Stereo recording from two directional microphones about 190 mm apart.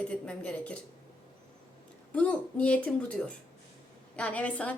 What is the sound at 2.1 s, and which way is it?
A woman's voice, 5° left (ahead or behind).